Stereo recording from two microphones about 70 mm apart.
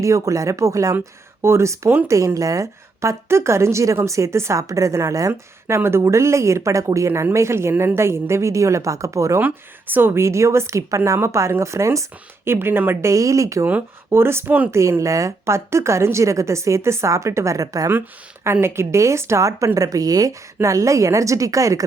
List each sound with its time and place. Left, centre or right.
0.0 s a woman's voice: right
1.4 s a woman's voice: right
5.3 s a woman's voice: right
9.4 s a woman's voice: right
10.2 s a woman's voice: right
12.5 s speech: right
14.1 s a woman's voice: right
18.6 s a woman's voice: right
20.6 s a woman's voice: right